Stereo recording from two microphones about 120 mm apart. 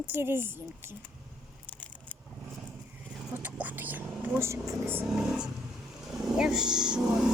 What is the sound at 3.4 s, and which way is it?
Vehicle, 15° right (ahead or behind).